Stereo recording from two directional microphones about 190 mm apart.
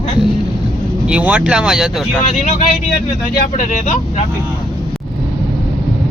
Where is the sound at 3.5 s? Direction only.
40° left (ahead or behind).